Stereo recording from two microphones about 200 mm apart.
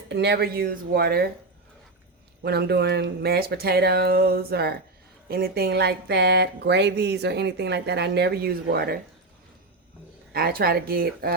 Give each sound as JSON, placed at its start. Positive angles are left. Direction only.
{"t": 0.1, "sound": "speech", "side_deg": -55}
{"t": 2.4, "sound": "speech", "side_deg": -55}
{"t": 10.3, "sound": "speech", "side_deg": -50}